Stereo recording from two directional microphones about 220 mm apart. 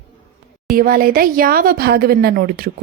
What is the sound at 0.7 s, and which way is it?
A woman's voice, 40° right (ahead or behind).